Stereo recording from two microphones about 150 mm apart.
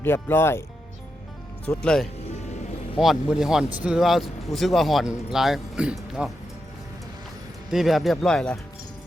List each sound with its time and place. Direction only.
0.0 s speech: 15° left (ahead or behind)
1.6 s speech: 10° left (ahead or behind)
2.3 s music: 50° left (ahead or behind)
3.0 s speech: 5° right (ahead or behind)
7.7 s speech: centre (ahead or behind)